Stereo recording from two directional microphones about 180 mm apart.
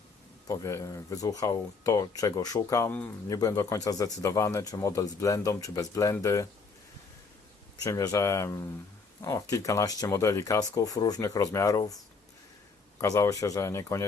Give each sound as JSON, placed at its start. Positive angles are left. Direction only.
{"t": 0.4, "sound": "speech", "side_deg": 15}
{"t": 7.9, "sound": "speech", "side_deg": 20}
{"t": 13.0, "sound": "speech", "side_deg": 15}